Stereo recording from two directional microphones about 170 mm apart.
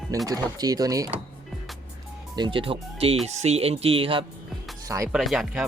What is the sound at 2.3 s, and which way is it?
Speech, 30° right (ahead or behind).